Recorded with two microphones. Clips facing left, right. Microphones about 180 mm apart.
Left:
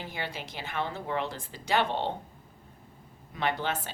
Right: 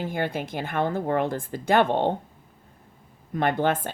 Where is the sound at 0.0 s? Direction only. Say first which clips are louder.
Right 10 dB; 50° right (ahead or behind).